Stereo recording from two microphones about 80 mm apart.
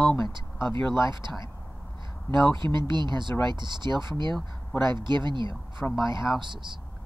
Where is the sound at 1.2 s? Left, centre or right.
Right.